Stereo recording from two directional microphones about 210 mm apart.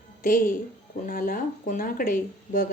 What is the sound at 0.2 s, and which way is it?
Speech, 40° left (ahead or behind).